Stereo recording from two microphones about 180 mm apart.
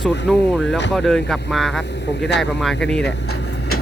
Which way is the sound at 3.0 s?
65° left (ahead or behind).